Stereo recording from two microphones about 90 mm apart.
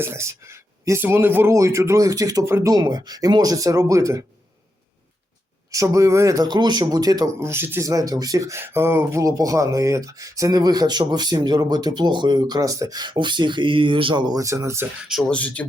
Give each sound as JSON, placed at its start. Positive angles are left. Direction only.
{"t": 0.0, "sound": "speech", "side_deg": -30}
{"t": 2.7, "sound": "speech", "side_deg": -45}
{"t": 5.7, "sound": "speech", "side_deg": -35}
{"t": 7.3, "sound": "speech", "side_deg": -30}
{"t": 7.9, "sound": "speech", "side_deg": -40}
{"t": 14.3, "sound": "speech", "side_deg": -35}
{"t": 15.3, "sound": "speech", "side_deg": 15}